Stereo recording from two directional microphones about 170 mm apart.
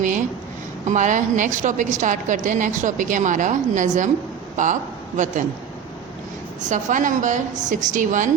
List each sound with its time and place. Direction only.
0.9 s a woman's voice: 45° right (ahead or behind)
6.6 s a woman's voice: 45° right (ahead or behind)